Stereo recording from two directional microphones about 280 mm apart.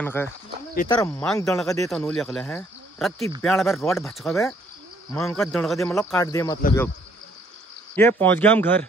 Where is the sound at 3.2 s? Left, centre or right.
Right.